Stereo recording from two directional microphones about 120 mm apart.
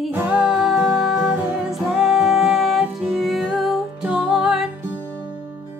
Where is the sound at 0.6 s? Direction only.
Centre (ahead or behind).